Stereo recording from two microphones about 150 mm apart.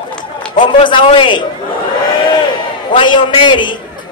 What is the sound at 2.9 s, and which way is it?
Speech, 35° left (ahead or behind).